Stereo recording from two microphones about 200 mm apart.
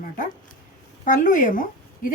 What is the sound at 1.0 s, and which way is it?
Speech, 40° left (ahead or behind).